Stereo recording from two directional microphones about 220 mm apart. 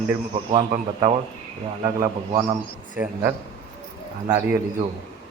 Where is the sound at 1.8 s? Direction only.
15° right (ahead or behind).